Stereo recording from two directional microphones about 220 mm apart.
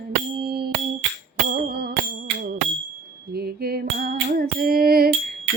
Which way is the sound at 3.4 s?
45° right (ahead or behind).